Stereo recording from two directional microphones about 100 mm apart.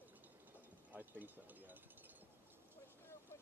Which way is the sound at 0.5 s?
15° right (ahead or behind).